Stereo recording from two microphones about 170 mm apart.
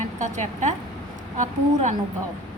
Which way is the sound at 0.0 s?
45° right (ahead or behind).